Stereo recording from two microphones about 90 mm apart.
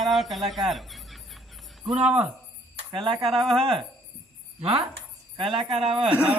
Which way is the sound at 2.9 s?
65° right (ahead or behind).